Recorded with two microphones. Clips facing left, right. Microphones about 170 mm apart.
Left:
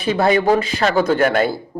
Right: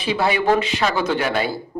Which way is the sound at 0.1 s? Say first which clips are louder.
Left 3 dB; 45° left (ahead or behind).